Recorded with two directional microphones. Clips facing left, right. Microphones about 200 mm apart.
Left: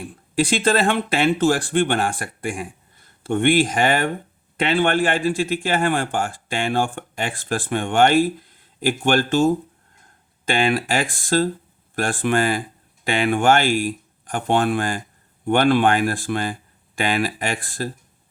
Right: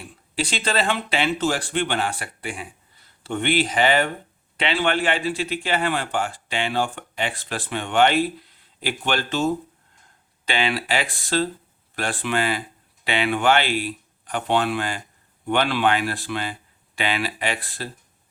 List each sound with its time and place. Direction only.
0.0 s a man's voice: 50° left (ahead or behind)